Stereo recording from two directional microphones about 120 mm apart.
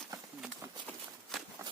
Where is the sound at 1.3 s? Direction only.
Centre (ahead or behind).